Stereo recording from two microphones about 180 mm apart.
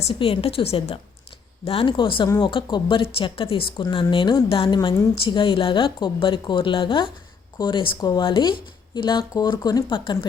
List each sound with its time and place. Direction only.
0.1 s a woman's voice: 35° left (ahead or behind)